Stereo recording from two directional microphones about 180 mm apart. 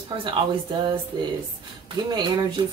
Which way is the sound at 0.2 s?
30° right (ahead or behind).